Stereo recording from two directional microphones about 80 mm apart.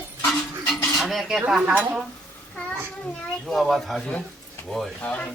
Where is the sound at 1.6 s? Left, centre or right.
Right.